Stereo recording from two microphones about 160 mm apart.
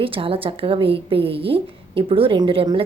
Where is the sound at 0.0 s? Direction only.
35° right (ahead or behind).